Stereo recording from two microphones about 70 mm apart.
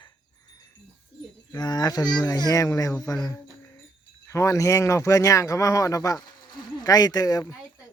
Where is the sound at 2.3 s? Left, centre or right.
Left.